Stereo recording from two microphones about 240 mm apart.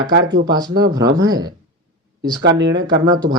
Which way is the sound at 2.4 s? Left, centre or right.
Right.